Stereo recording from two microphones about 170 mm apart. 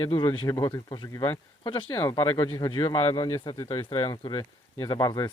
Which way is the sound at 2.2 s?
30° left (ahead or behind).